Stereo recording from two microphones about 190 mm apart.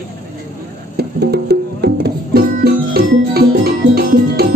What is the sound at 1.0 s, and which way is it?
Music, 60° right (ahead or behind).